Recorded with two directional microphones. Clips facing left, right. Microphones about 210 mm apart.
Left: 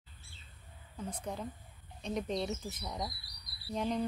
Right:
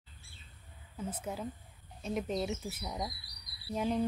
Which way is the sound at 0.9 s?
5° right (ahead or behind).